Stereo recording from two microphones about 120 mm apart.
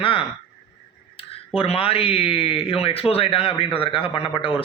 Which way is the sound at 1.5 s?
50° left (ahead or behind).